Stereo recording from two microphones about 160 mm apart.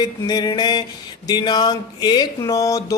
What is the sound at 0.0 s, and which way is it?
Speech, 25° left (ahead or behind).